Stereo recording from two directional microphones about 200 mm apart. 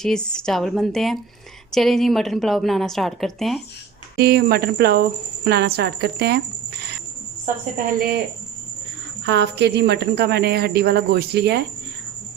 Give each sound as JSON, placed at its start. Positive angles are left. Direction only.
{"t": 0.0, "sound": "a woman's voice", "side_deg": 5}
{"t": 4.2, "sound": "speech", "side_deg": -50}
{"t": 9.2, "sound": "speech", "side_deg": -60}